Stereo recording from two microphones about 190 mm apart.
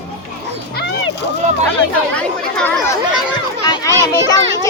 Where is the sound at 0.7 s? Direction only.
60° left (ahead or behind).